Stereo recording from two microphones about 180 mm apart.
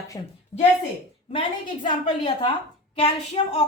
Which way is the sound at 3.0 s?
35° left (ahead or behind).